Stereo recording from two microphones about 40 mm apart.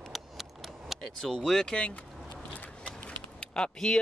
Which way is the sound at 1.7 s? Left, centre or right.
Left.